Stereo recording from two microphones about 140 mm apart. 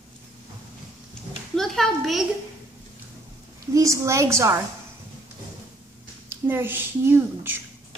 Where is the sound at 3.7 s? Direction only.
25° right (ahead or behind).